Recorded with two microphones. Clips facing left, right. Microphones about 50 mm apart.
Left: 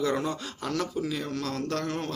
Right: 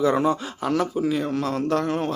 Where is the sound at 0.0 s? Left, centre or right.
Centre.